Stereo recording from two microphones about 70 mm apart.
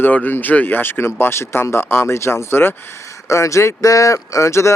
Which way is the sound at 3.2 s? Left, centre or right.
Left.